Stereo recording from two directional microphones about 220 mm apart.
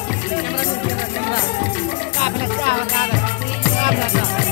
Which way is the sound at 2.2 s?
25° right (ahead or behind).